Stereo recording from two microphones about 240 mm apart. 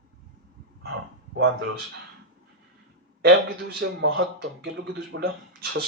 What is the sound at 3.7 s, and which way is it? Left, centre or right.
Speech, right.